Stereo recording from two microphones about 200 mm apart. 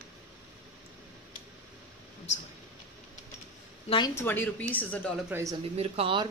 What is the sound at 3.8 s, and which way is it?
Speech, 25° left (ahead or behind).